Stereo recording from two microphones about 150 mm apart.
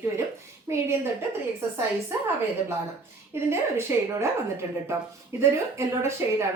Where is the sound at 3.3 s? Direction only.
15° right (ahead or behind).